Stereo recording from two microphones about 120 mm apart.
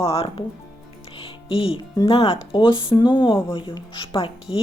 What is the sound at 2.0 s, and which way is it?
Speech, 55° left (ahead or behind).